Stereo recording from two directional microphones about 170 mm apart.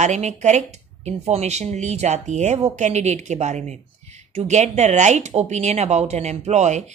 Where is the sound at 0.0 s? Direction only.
45° right (ahead or behind).